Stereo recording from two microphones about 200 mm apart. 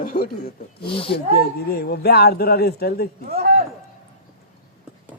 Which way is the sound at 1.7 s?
55° left (ahead or behind).